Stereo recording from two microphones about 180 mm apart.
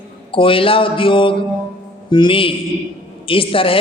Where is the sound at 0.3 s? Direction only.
30° left (ahead or behind).